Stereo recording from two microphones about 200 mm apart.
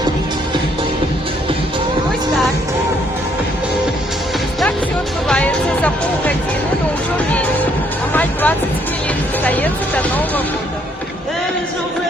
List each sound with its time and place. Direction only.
5.3 s music: 5° left (ahead or behind)
8.1 s music: 10° left (ahead or behind)